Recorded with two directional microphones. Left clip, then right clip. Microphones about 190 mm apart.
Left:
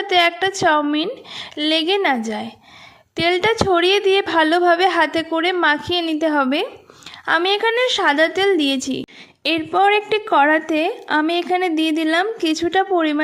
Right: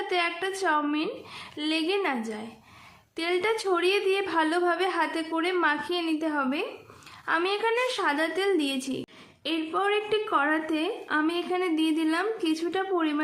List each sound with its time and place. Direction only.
0.1 s a woman's voice: 40° left (ahead or behind)